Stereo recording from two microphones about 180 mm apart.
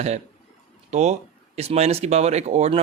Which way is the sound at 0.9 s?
40° right (ahead or behind).